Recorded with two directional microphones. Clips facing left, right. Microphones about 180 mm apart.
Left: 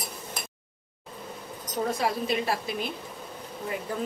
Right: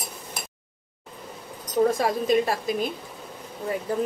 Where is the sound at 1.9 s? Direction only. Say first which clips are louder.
Right 5 dB; 45° right (ahead or behind).